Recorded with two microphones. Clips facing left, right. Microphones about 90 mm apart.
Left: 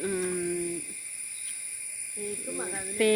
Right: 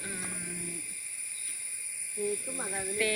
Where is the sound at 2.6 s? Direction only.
Centre (ahead or behind).